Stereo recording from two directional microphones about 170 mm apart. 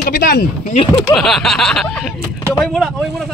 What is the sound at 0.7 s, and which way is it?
Speech, 35° left (ahead or behind).